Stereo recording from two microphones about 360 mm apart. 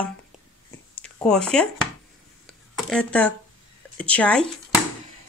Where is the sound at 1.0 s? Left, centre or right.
Centre.